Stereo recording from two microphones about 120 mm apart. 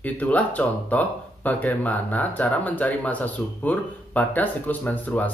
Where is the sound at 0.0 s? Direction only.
10° left (ahead or behind).